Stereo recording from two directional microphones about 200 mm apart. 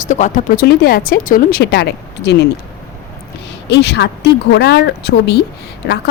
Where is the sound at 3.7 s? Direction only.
60° left (ahead or behind).